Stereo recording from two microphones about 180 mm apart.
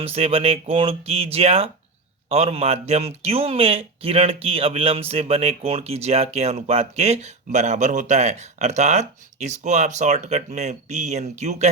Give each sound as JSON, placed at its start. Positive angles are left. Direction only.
{"t": 0.0, "sound": "speech", "side_deg": -35}